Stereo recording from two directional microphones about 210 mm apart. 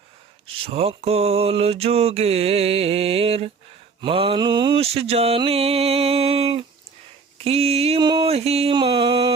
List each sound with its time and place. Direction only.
0.4 s mantra: 25° right (ahead or behind)